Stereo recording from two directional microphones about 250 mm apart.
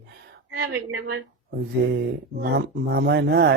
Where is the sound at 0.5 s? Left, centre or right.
Right.